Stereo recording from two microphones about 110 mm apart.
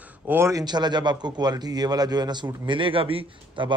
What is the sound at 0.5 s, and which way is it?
A man's voice, 40° right (ahead or behind).